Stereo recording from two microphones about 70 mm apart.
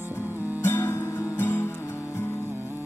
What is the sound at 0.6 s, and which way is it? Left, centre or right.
Music, left.